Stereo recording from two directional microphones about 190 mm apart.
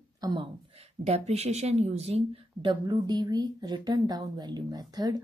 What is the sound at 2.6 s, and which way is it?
Speech, 20° right (ahead or behind).